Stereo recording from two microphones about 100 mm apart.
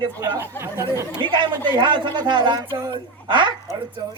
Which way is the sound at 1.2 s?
55° right (ahead or behind).